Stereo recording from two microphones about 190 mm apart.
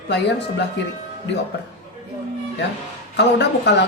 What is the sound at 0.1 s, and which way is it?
A woman's voice, 65° left (ahead or behind).